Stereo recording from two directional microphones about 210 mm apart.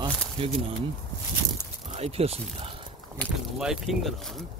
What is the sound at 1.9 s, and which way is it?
Speech, 30° right (ahead or behind).